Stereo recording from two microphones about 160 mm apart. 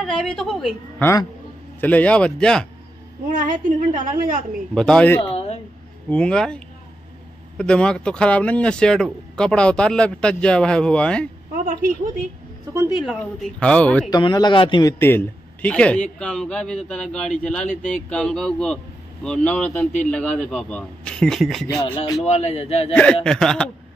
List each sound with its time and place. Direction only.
0.0 s a man's voice: 5° left (ahead or behind)
3.3 s a woman's voice: 55° right (ahead or behind)
4.7 s a man's voice: 5° left (ahead or behind)
5.2 s a sound: 40° left (ahead or behind)
6.0 s a man's voice: 5° left (ahead or behind)
13.0 s a man's voice: centre (ahead or behind)
14.1 s a man's voice: 25° left (ahead or behind); by 21.7 s centre (ahead or behind)
21.7 s speech: 30° left (ahead or behind)
22.2 s speech: 40° left (ahead or behind)
23.2 s a man's voice: 5° left (ahead or behind)